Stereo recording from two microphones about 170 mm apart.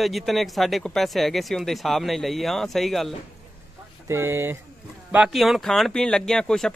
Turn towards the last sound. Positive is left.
turn(degrees=5)  # may be behind; listen again after turning